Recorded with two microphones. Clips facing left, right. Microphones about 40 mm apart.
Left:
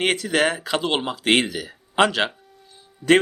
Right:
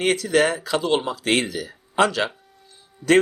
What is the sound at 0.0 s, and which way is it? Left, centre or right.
Speech, left.